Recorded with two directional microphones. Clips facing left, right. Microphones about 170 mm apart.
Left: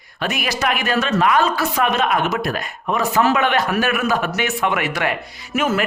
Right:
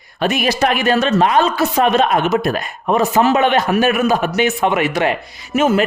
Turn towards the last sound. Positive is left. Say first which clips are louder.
# right 5 dB
turn(degrees=-25)  # may be behind; listen again after turning